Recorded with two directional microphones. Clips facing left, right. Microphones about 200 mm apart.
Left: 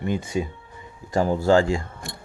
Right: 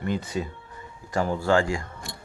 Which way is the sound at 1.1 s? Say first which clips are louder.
Left 4 dB; 35° left (ahead or behind).